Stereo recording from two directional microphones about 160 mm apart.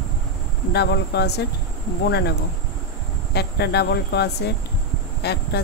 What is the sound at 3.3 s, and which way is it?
Speech, 90° left.